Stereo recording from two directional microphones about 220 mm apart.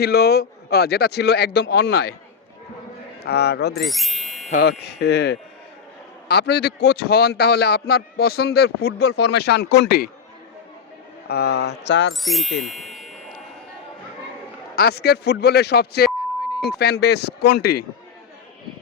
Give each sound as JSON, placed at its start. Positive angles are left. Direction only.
{"t": 0.0, "sound": "a man's voice", "side_deg": 45}
{"t": 3.2, "sound": "a man's voice", "side_deg": 50}
{"t": 3.8, "sound": "speech", "side_deg": 0}
{"t": 4.4, "sound": "speech", "side_deg": 35}
{"t": 4.8, "sound": "a man's voice", "side_deg": 50}
{"t": 11.3, "sound": "a man's voice", "side_deg": 45}
{"t": 12.2, "sound": "ding", "side_deg": 0}
{"t": 14.8, "sound": "a man's voice", "side_deg": 45}